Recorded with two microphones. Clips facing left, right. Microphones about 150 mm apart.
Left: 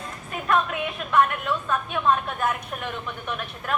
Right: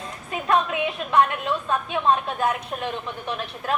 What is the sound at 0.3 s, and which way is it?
Speech, 20° right (ahead or behind).